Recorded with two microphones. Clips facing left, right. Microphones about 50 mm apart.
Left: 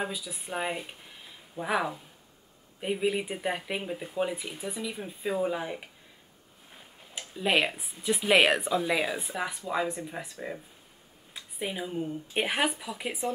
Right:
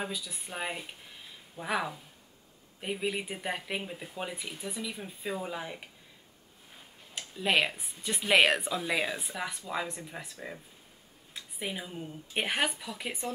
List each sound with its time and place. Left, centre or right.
0.0 s speech: centre